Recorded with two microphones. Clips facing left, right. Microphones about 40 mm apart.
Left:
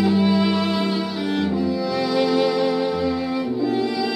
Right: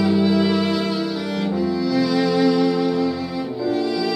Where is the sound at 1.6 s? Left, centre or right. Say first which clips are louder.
Right 2 dB; centre.